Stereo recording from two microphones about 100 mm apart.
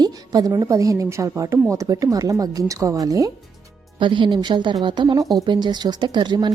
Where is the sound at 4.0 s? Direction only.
55° right (ahead or behind).